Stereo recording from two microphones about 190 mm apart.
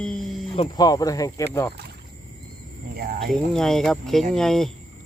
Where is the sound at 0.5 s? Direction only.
20° left (ahead or behind).